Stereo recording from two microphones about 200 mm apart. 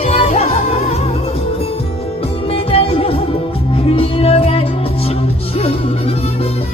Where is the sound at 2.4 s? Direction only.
30° left (ahead or behind).